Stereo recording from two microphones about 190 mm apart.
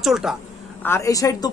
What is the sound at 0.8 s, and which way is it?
Speech, 15° left (ahead or behind).